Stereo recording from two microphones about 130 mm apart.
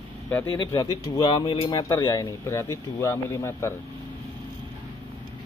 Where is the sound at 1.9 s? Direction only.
30° left (ahead or behind).